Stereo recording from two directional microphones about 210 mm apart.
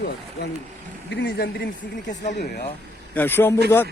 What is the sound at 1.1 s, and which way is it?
Speech, 55° left (ahead or behind).